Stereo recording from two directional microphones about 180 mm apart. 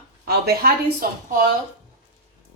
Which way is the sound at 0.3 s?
60° right (ahead or behind).